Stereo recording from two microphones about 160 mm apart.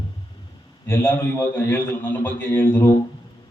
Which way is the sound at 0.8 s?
15° left (ahead or behind).